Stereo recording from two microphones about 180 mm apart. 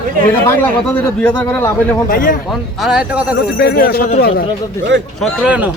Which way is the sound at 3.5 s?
60° left (ahead or behind).